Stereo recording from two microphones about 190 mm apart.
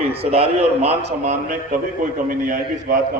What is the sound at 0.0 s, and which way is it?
A man's voice, 30° right (ahead or behind).